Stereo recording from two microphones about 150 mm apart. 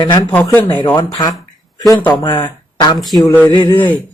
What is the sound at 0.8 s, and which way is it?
Speech, 25° left (ahead or behind).